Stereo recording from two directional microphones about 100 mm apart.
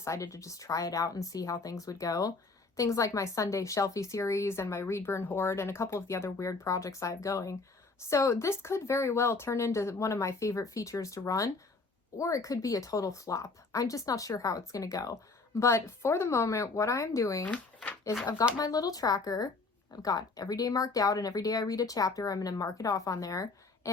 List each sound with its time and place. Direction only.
0.0 s a woman's voice: 30° left (ahead or behind)
17.4 s speech: 15° left (ahead or behind)
18.5 s speech: 40° left (ahead or behind)